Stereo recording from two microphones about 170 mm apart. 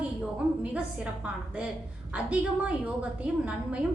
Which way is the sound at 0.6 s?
5° right (ahead or behind).